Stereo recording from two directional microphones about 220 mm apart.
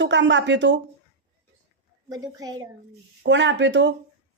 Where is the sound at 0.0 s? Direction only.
55° right (ahead or behind).